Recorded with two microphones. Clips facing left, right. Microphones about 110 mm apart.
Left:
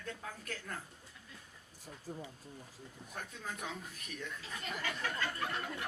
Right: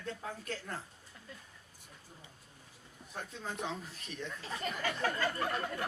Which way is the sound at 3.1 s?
25° right (ahead or behind).